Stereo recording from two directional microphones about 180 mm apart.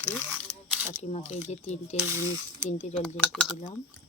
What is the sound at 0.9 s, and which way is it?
Speech, 40° left (ahead or behind).